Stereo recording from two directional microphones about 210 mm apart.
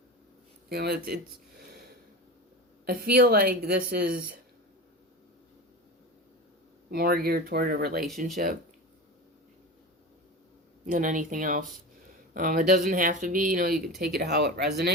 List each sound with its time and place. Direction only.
0.7 s speech: 50° right (ahead or behind)
6.9 s speech: 45° right (ahead or behind)
10.8 s speech: 40° right (ahead or behind)